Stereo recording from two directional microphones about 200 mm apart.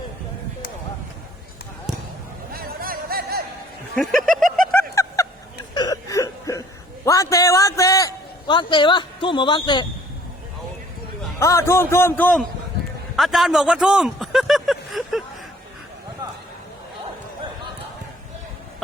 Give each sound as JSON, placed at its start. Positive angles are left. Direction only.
{"t": 2.5, "sound": "music", "side_deg": -50}
{"t": 3.9, "sound": "speech", "side_deg": 0}
{"t": 4.7, "sound": "snicker", "side_deg": 15}
{"t": 5.7, "sound": "a sound", "side_deg": 20}
{"t": 11.3, "sound": "a man's voice", "side_deg": 15}
{"t": 13.1, "sound": "a sound", "side_deg": 0}